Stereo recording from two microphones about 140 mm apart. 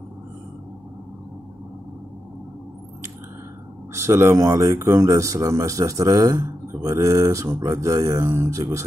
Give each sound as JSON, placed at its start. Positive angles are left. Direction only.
{"t": 3.9, "sound": "speech", "side_deg": -20}